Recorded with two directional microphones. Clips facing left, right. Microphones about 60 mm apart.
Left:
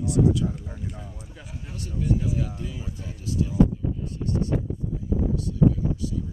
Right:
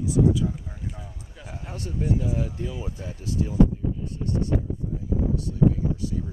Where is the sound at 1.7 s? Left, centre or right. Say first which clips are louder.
Even; right.